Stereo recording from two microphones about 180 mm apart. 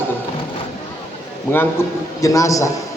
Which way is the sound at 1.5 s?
10° left (ahead or behind).